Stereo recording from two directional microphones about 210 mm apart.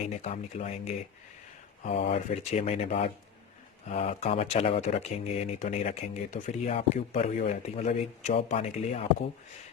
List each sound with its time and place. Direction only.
0.2 s speech: 35° left (ahead or behind)